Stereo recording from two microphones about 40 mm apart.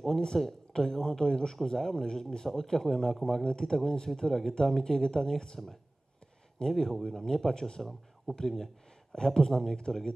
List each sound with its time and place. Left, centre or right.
0.0 s speech: centre